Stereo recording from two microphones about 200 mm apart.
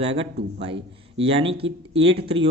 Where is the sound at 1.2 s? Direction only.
30° right (ahead or behind).